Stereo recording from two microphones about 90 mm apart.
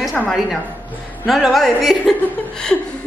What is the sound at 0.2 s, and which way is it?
Speech, 5° left (ahead or behind).